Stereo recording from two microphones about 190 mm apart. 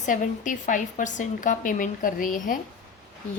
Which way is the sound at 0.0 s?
45° left (ahead or behind).